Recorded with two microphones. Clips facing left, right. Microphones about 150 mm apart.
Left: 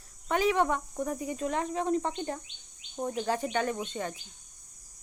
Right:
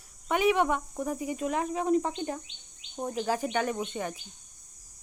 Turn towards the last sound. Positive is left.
turn(degrees=-15)  # may be behind; listen again after turning